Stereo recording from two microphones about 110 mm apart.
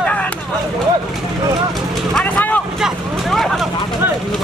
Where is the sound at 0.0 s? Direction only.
15° left (ahead or behind).